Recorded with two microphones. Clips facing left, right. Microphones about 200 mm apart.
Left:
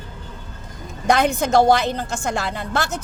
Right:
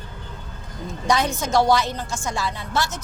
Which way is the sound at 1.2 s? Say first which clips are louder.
Left 6 dB; 55° left (ahead or behind).